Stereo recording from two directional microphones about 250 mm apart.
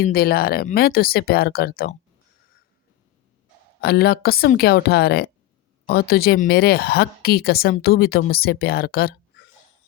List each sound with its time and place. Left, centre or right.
0.0 s speech: left
3.8 s speech: left